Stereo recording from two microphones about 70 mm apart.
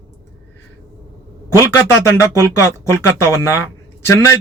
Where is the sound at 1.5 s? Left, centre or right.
Left.